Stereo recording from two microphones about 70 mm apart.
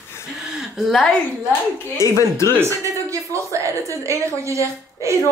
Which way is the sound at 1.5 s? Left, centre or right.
Left.